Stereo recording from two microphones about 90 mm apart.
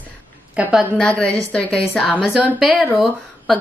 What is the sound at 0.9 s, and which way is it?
A woman's voice, 10° left (ahead or behind).